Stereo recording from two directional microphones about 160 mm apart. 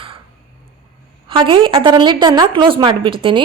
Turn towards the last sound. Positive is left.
turn(degrees=-30)  # may be behind; listen again after turning